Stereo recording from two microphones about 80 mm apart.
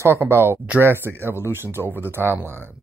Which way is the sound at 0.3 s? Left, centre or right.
Right.